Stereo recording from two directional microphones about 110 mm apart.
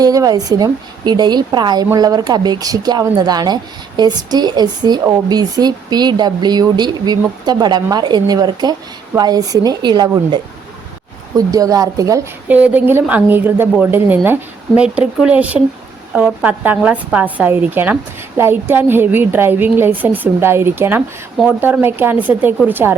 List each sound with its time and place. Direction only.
0.0 s speech: 35° right (ahead or behind)
12.5 s a woman's voice: 15° right (ahead or behind)